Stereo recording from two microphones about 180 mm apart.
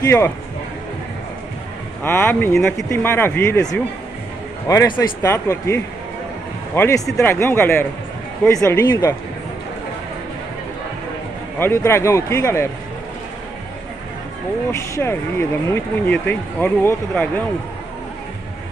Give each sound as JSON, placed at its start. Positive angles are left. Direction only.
{"t": 0.0, "sound": "speech", "side_deg": 15}
{"t": 2.0, "sound": "speech", "side_deg": 10}
{"t": 11.6, "sound": "speech", "side_deg": 15}
{"t": 14.7, "sound": "speech", "side_deg": 15}